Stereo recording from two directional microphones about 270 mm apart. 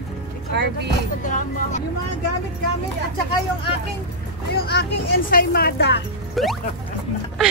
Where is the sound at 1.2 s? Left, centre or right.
Left.